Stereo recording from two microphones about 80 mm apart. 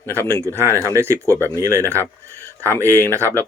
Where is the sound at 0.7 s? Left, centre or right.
Left.